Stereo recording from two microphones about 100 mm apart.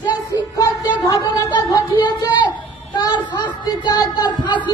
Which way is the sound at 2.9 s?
50° left (ahead or behind).